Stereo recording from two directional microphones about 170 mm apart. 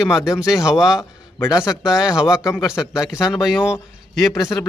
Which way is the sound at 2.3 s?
15° left (ahead or behind).